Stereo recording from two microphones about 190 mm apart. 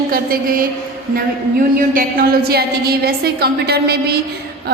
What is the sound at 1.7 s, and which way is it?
A woman's voice, 50° right (ahead or behind).